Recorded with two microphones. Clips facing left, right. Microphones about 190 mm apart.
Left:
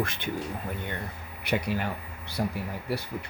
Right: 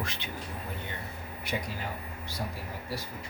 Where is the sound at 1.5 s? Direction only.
65° left (ahead or behind).